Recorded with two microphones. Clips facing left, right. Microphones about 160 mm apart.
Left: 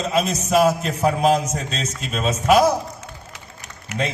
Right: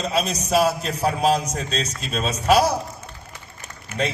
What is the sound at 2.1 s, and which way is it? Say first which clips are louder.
Speech: left 2 dB; 35° right (ahead or behind).